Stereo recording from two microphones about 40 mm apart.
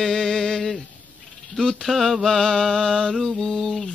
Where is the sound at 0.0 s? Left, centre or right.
Centre.